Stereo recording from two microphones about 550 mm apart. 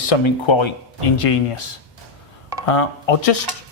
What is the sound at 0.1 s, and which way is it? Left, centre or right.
Speech, left.